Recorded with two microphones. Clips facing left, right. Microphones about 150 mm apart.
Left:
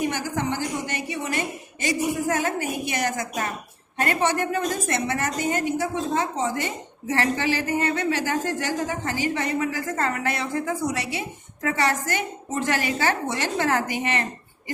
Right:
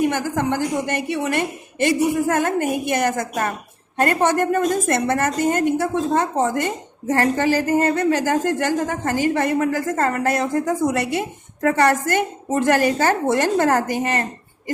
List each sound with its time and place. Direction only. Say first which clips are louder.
0.0 s a woman's voice: right 6 dB; 50° right (ahead or behind)